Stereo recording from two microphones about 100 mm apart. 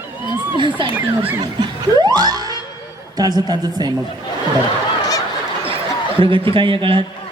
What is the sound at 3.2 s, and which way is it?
Speech, 40° right (ahead or behind).